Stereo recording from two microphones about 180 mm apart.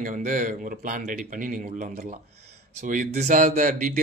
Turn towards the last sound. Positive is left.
turn(degrees=-50)  # may be behind; listen again after turning